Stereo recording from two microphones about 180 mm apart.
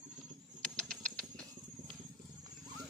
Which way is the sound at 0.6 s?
5° left (ahead or behind).